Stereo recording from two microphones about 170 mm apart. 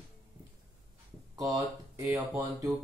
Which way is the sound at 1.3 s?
20° right (ahead or behind).